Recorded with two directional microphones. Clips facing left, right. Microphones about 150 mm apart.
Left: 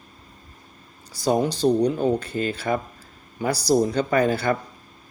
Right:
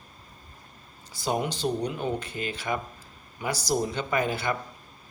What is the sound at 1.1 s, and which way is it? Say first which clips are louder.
Speech: left 7 dB; 40° left (ahead or behind).